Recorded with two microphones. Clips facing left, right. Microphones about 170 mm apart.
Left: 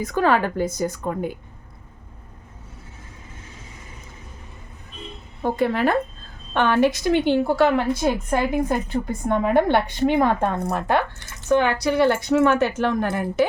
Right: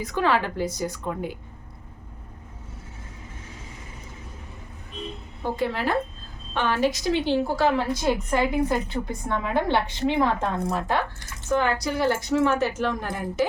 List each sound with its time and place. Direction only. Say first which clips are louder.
0.0 s a woman's voice: left 4 dB; 45° left (ahead or behind)
5.4 s a woman's voice: left 6 dB; 55° left (ahead or behind)